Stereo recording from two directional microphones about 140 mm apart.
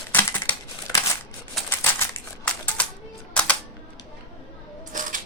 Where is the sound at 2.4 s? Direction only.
10° left (ahead or behind).